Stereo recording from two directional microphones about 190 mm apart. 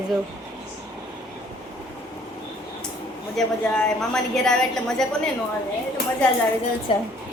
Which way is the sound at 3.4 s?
Centre (ahead or behind).